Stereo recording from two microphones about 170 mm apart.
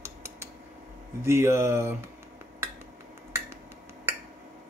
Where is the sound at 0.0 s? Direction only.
15° right (ahead or behind).